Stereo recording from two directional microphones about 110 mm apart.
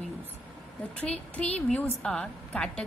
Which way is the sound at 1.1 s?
10° left (ahead or behind).